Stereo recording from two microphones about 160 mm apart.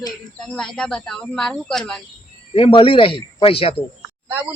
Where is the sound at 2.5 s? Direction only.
35° left (ahead or behind).